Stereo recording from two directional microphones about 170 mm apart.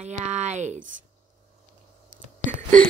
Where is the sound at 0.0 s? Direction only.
45° right (ahead or behind).